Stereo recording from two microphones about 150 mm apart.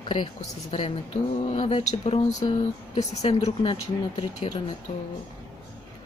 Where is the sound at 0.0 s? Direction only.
35° left (ahead or behind).